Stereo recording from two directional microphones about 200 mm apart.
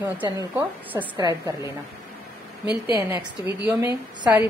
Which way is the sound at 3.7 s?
15° right (ahead or behind).